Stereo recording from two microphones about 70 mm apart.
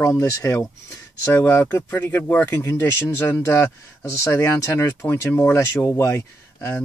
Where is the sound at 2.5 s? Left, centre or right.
Left.